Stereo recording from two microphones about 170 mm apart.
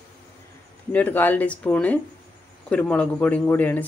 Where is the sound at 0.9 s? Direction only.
10° left (ahead or behind).